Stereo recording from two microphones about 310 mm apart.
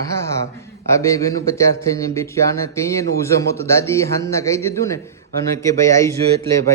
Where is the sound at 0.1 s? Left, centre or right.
Centre.